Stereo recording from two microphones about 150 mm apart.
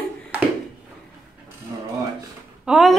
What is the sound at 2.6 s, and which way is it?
Speech, 5° right (ahead or behind).